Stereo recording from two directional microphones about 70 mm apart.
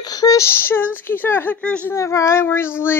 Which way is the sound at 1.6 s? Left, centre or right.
Centre.